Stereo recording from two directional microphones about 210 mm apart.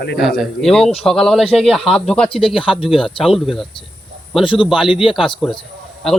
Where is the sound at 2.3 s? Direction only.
25° left (ahead or behind).